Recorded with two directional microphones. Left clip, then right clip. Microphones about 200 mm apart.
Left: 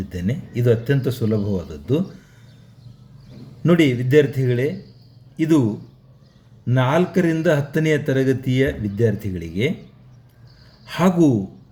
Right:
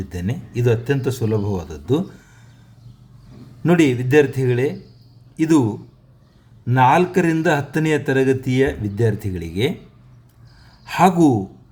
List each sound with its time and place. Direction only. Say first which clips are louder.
0.1 s speech: left 1 dB; 15° right (ahead or behind)
3.6 s a man's voice: right 1 dB; 15° right (ahead or behind)
6.7 s speech: right 5 dB; 15° right (ahead or behind)
10.8 s speech: right 4 dB; 20° right (ahead or behind)